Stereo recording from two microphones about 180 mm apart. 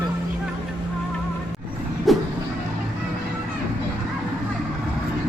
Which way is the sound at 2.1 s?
Centre (ahead or behind).